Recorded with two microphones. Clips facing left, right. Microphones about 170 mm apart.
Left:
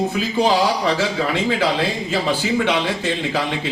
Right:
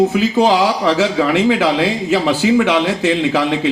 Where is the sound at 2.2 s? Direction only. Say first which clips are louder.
Right 6 dB; 90° right; by 3.7 s 75° right (ahead or behind).